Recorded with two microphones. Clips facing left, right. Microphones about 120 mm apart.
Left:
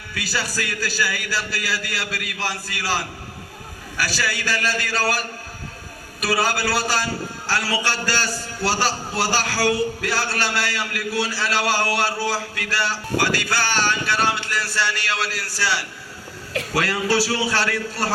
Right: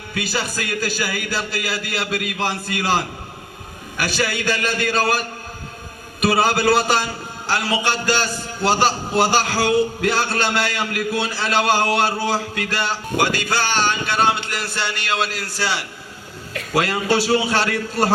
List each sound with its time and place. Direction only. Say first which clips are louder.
0.1 s a man's voice: right 3 dB; 20° right (ahead or behind)